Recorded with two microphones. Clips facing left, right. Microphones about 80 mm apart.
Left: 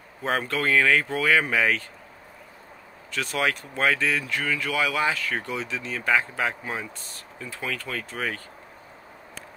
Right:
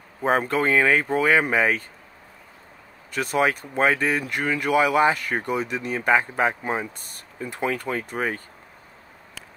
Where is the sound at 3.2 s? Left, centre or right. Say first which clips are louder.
Right 5 dB; right.